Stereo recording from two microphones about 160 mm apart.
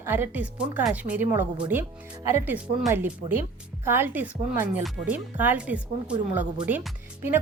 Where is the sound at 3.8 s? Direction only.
15° right (ahead or behind).